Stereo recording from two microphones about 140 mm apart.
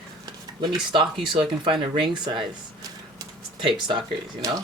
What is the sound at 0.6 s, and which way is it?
Speech, 35° right (ahead or behind).